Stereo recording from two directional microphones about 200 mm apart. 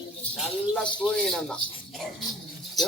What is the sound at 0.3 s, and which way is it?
Speech, centre (ahead or behind).